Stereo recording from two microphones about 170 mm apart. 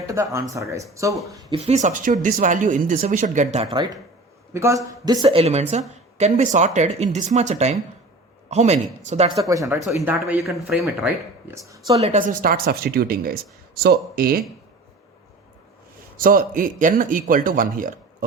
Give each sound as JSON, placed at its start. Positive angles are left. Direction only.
{"t": 0.1, "sound": "speech", "side_deg": -20}
{"t": 1.5, "sound": "speech", "side_deg": -40}
{"t": 4.5, "sound": "speech", "side_deg": -20}
{"t": 9.3, "sound": "speech", "side_deg": -20}
{"t": 11.5, "sound": "speech", "side_deg": -20}
{"t": 11.9, "sound": "speech", "side_deg": -40}
{"t": 16.1, "sound": "speech", "side_deg": -55}